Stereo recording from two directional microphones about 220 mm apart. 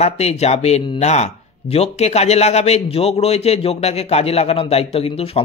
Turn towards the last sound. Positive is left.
turn(degrees=25)  # may be behind; listen again after turning